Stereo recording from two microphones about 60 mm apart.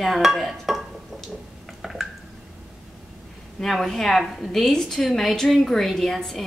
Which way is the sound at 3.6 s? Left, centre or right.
Centre.